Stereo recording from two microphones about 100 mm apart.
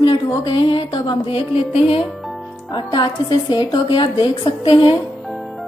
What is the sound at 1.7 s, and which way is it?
Speech, 80° left.